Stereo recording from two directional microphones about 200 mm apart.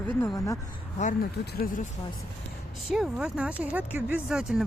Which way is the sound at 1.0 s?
40° left (ahead or behind).